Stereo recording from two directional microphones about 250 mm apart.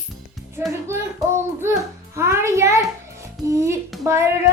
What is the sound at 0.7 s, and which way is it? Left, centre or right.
Child singing, centre.